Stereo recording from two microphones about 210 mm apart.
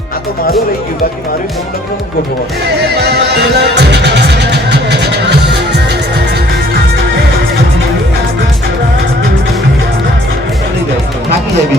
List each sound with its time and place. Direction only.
3.0 s music: 50° right (ahead or behind)